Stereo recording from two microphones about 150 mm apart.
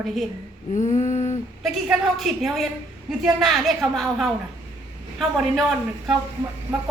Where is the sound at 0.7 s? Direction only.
50° left (ahead or behind).